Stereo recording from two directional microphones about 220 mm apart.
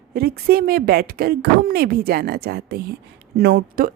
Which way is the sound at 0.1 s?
45° right (ahead or behind).